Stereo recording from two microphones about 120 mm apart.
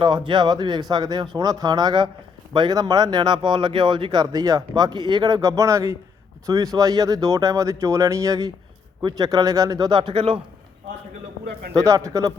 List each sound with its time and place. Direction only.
0.0 s speech: 40° right (ahead or behind)
11.8 s speech: 25° right (ahead or behind)